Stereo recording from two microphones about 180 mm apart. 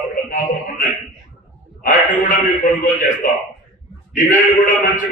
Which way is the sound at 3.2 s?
50° left (ahead or behind).